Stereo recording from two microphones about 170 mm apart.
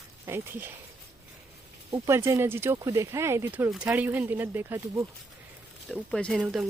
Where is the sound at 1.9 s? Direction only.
15° right (ahead or behind).